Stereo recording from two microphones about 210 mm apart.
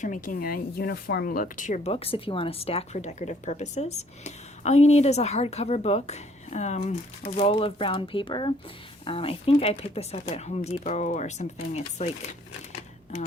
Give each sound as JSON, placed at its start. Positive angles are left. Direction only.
{"t": 0.0, "sound": "speech", "side_deg": 40}